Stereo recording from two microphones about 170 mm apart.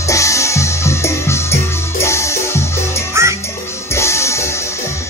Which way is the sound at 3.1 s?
15° right (ahead or behind).